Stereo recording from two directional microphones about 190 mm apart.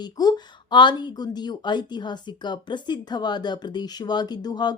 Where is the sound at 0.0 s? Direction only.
20° left (ahead or behind).